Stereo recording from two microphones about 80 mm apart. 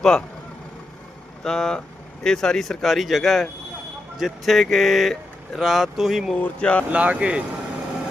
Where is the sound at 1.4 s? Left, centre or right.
Centre.